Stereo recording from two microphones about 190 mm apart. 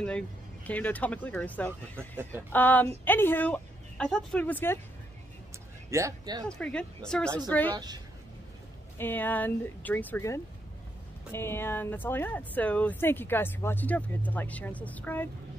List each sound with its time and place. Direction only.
0.7 s speech: 10° left (ahead or behind)
5.9 s speech: 15° right (ahead or behind)
6.4 s speech: 5° left (ahead or behind)
7.7 s a woman's voice: 20° right (ahead or behind)
8.9 s speech: 10° left (ahead or behind)